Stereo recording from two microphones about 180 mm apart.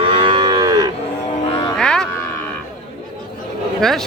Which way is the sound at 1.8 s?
5° left (ahead or behind).